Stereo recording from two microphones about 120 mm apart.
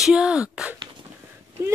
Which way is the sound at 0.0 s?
5° right (ahead or behind).